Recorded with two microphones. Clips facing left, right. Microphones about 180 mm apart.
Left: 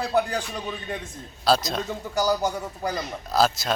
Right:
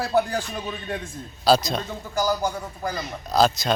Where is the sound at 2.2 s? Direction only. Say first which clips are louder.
Even; 20° left (ahead or behind).